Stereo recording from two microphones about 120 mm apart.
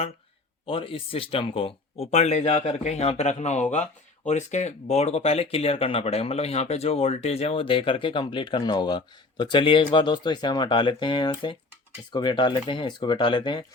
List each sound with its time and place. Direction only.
0.6 s speech: 50° left (ahead or behind)